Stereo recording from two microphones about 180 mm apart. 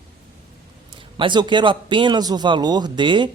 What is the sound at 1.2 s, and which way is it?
Speech, 25° right (ahead or behind).